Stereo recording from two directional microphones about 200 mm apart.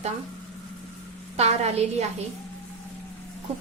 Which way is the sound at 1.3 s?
30° right (ahead or behind).